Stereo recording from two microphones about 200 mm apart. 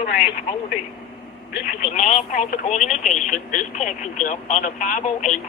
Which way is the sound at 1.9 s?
35° left (ahead or behind).